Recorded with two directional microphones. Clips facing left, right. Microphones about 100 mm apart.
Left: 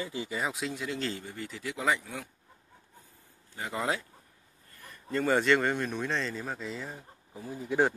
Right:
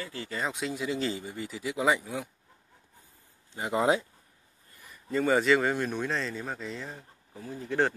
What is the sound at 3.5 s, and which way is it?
Speech, 20° right (ahead or behind).